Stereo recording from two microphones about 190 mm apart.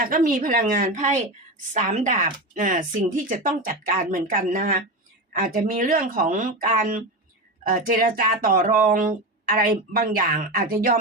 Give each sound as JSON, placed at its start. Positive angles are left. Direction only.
{"t": 0.0, "sound": "speech", "side_deg": -50}